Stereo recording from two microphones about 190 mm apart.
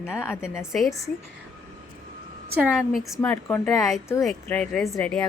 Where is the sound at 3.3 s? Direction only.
10° left (ahead or behind).